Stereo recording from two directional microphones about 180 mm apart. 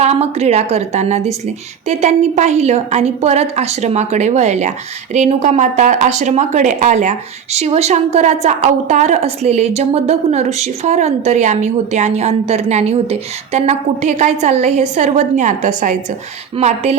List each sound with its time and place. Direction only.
0.0 s speech: 35° right (ahead or behind)